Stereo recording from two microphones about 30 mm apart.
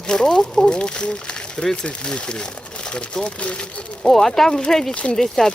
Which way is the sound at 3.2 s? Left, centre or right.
Left.